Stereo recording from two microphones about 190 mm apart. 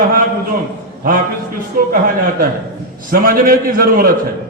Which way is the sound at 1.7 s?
45° right (ahead or behind).